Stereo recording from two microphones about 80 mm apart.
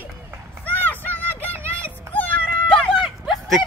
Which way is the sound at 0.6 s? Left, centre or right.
Left.